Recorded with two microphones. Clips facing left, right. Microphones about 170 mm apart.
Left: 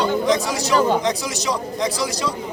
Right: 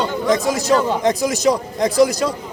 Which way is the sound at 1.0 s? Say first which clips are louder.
Right 7 dB; 50° right (ahead or behind).